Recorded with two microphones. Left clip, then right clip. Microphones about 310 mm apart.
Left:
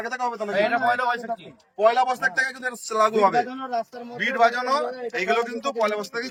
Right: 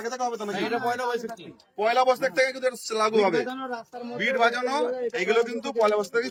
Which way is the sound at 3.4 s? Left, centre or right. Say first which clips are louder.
Left 1 dB; left.